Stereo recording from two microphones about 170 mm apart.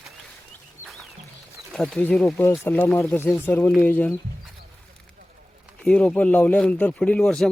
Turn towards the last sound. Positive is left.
turn(degrees=5)  # may be behind; listen again after turning